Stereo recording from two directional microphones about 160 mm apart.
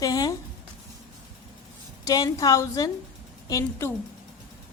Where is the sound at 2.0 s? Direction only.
25° left (ahead or behind).